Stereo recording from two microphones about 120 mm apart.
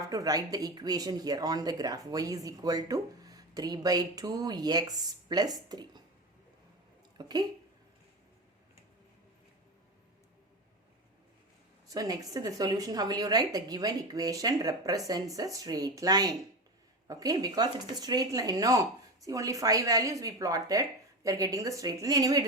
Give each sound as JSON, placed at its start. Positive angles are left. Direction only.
{"t": 0.1, "sound": "speech", "side_deg": -30}
{"t": 7.2, "sound": "speech", "side_deg": -35}
{"t": 11.9, "sound": "a woman's voice", "side_deg": -30}